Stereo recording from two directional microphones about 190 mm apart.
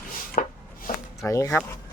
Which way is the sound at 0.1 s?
45° left (ahead or behind).